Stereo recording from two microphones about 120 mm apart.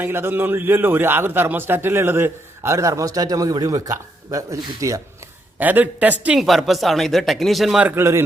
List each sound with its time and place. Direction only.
0.0 s a man's voice: 20° right (ahead or behind)
5.5 s a man's voice: 15° right (ahead or behind)
7.9 s a man's voice: 20° right (ahead or behind)